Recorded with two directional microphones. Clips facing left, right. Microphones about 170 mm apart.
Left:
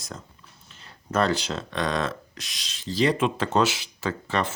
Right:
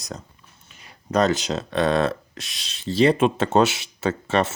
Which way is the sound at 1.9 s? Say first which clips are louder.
Right 6 dB; 60° right (ahead or behind).